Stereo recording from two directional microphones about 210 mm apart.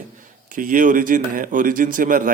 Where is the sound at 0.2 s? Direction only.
40° right (ahead or behind).